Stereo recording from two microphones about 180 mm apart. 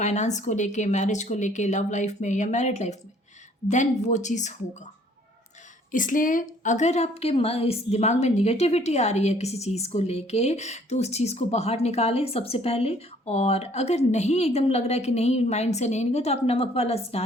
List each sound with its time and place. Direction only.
0.0 s a woman's voice: 40° left (ahead or behind)
5.9 s a woman's voice: 45° left (ahead or behind)